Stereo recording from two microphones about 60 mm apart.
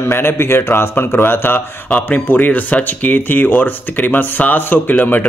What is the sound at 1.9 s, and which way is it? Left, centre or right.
A man's voice, left.